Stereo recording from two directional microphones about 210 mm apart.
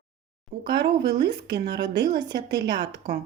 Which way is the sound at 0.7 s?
55° right (ahead or behind).